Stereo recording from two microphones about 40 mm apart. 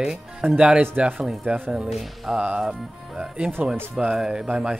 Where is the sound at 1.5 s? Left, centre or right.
Right.